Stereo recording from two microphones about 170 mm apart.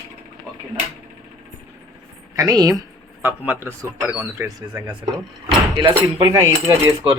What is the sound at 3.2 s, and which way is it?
Speech, 10° right (ahead or behind).